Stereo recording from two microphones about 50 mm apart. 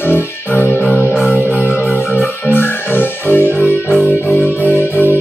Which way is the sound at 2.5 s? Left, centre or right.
Left.